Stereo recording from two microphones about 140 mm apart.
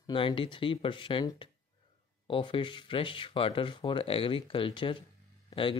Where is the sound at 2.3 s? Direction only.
35° left (ahead or behind).